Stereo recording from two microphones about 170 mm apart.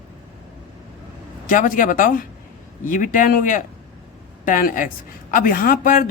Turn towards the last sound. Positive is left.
turn(degrees=55)  # may be behind; listen again after turning